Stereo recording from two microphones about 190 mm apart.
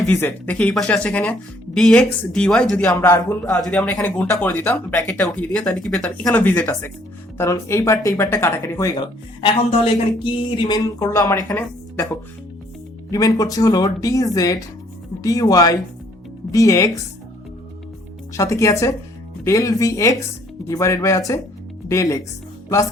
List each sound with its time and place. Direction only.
0.1 s speech: 10° left (ahead or behind)
2.8 s speech: 15° left (ahead or behind)
9.4 s speech: 30° left (ahead or behind); by 12.0 s 10° left (ahead or behind)
13.1 s speech: 20° left (ahead or behind)
18.3 s speech: 15° left (ahead or behind)